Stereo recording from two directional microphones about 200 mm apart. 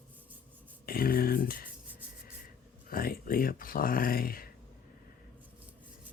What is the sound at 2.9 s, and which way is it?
Speech, 45° left (ahead or behind).